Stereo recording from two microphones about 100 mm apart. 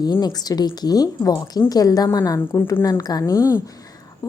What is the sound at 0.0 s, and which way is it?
A woman's voice, 45° left (ahead or behind).